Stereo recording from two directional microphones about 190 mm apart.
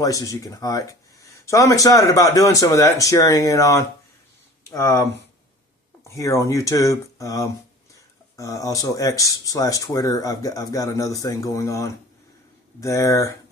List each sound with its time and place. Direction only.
0.0 s speech: 15° left (ahead or behind)